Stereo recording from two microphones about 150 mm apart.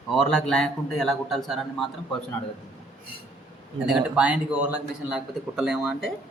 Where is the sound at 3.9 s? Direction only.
5° right (ahead or behind).